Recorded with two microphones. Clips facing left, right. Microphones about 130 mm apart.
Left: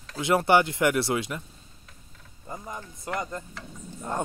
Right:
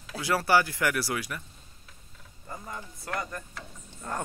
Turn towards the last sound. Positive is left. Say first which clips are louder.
# left 4 dB
turn(degrees=20)  # may be behind; listen again after turning